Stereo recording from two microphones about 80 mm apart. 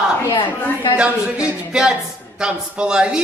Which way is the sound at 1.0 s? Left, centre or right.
Centre.